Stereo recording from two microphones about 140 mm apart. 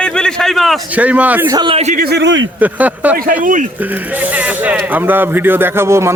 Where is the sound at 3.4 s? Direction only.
65° right (ahead or behind).